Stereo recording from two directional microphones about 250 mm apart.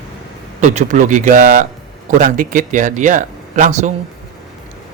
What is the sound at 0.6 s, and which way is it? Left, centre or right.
Speech, right.